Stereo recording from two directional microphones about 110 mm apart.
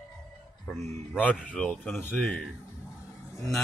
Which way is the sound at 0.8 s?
85° right.